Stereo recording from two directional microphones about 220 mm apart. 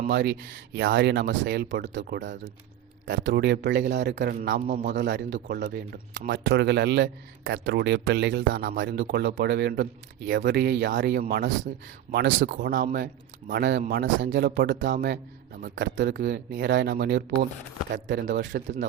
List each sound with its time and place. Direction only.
0.1 s a man's voice: 50° right (ahead or behind)
4.9 s a man's voice: 55° right (ahead or behind)
12.1 s speech: 55° right (ahead or behind)
12.5 s speech: 45° right (ahead or behind)
13.5 s a man's voice: 50° right (ahead or behind)